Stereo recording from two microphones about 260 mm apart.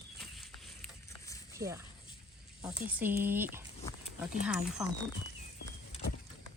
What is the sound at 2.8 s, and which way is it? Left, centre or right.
Speech, centre.